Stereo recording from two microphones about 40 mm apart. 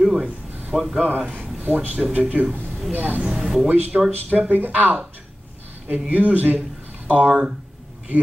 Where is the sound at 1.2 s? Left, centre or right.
Right.